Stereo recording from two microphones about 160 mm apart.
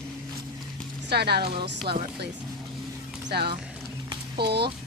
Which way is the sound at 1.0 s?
90° right.